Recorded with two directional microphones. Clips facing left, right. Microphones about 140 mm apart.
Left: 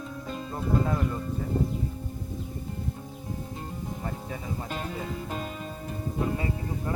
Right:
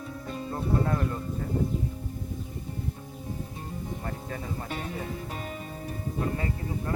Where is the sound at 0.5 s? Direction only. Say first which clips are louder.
Even; 10° left (ahead or behind).